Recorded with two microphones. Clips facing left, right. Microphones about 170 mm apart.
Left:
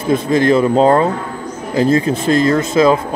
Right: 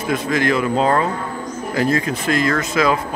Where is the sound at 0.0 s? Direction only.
30° left (ahead or behind).